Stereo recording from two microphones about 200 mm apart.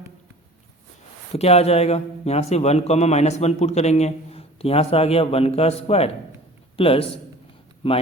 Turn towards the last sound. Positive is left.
turn(degrees=30)  # may be behind; listen again after turning